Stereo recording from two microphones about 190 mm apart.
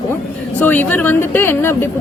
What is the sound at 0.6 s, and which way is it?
Speech, 10° left (ahead or behind).